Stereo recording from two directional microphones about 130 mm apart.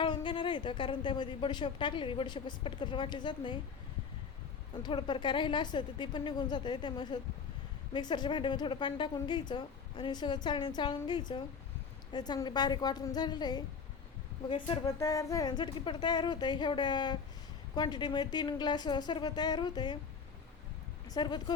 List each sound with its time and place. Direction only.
0.0 s a woman's voice: 40° left (ahead or behind)
4.8 s a woman's voice: 35° left (ahead or behind)
14.8 s a woman's voice: 25° left (ahead or behind)
21.1 s a woman's voice: 35° left (ahead or behind)